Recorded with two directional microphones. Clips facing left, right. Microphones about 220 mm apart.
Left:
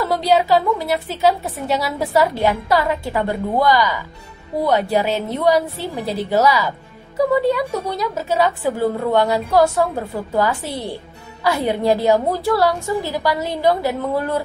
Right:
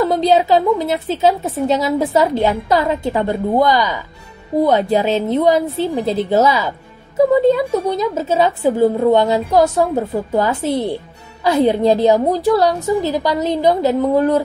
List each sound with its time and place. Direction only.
0.1 s a woman's voice: 20° right (ahead or behind)